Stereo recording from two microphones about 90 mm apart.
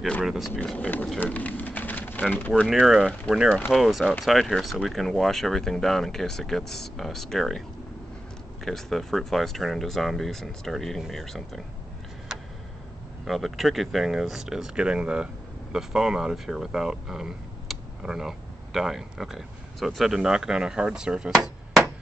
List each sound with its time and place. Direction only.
0.2 s speech: 5° right (ahead or behind)
0.7 s speech: 20° left (ahead or behind)
2.7 s speech: 5° right (ahead or behind)
8.6 s speech: 5° left (ahead or behind)
12.3 s tick-tock: 5° right (ahead or behind)
13.3 s speech: centre (ahead or behind)